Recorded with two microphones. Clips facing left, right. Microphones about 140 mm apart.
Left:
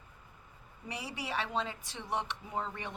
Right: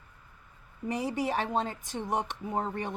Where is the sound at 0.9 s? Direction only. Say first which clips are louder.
Right 10 dB; 45° right (ahead or behind).